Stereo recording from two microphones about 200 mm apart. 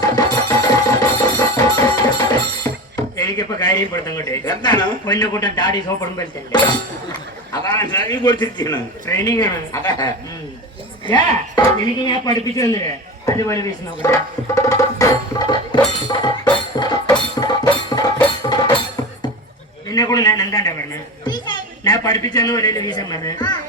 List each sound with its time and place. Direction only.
0.0 s music: 20° left (ahead or behind)
2.9 s speech: 20° left (ahead or behind)
11.1 s speech: 20° left (ahead or behind)
13.2 s music: 15° left (ahead or behind)
19.9 s a man's voice: 20° left (ahead or behind)